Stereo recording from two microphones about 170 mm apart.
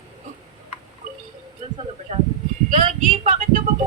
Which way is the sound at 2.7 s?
50° right (ahead or behind).